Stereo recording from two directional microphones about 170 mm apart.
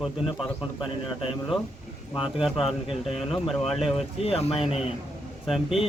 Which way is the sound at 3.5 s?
Centre (ahead or behind).